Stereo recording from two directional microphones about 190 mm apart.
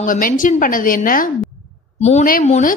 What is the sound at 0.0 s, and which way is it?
A woman's voice, 45° left (ahead or behind).